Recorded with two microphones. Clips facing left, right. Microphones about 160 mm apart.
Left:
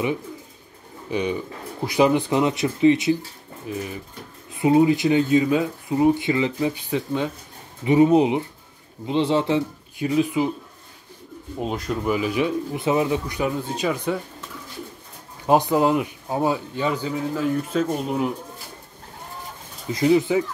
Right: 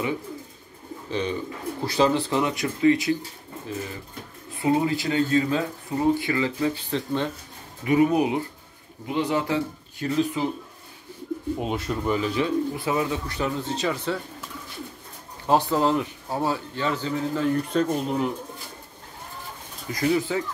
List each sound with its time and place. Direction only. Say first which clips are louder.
1.1 s speech: left 3 dB; 15° left (ahead or behind)
4.6 s speech: left 6 dB; 20° left (ahead or behind)
7.8 s speech: left 4 dB; 25° left (ahead or behind)
9.9 s speech: left 4 dB; 10° left (ahead or behind)
11.6 s speech: left 6 dB; centre (ahead or behind)
15.4 s speech: left 3 dB; 15° left (ahead or behind)
19.9 s speech: left 5 dB; 20° left (ahead or behind)